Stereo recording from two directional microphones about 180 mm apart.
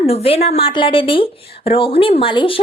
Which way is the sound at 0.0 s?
35° left (ahead or behind).